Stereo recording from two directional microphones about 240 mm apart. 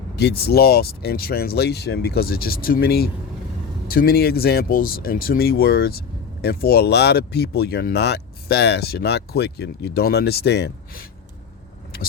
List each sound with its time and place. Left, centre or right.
0.2 s speech: left